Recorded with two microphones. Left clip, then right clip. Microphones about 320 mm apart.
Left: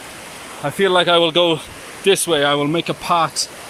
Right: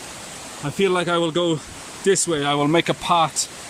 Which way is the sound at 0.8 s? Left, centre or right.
Centre.